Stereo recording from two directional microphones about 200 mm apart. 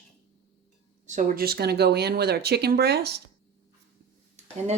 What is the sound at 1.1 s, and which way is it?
Speech, 35° right (ahead or behind).